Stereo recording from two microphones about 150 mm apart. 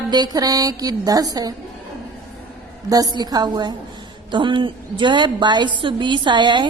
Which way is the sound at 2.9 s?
25° right (ahead or behind).